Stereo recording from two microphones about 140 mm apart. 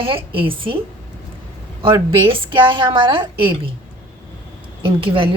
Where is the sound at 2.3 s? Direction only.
35° right (ahead or behind).